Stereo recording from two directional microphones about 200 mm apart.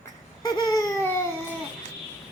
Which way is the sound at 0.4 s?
20° left (ahead or behind).